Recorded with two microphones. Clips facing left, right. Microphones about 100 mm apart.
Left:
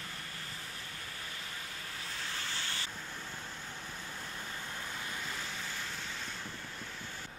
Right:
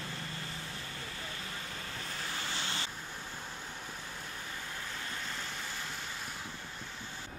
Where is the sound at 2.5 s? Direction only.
20° right (ahead or behind).